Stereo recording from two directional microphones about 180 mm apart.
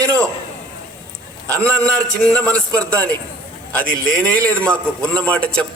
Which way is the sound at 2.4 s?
5° left (ahead or behind).